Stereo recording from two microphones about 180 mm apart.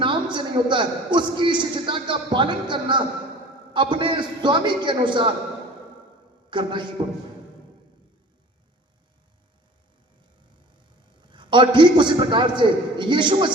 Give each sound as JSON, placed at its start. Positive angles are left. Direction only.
{"t": 0.0, "sound": "a man's voice", "side_deg": -25}
{"t": 6.5, "sound": "a man's voice", "side_deg": -25}
{"t": 11.2, "sound": "a man's voice", "side_deg": -25}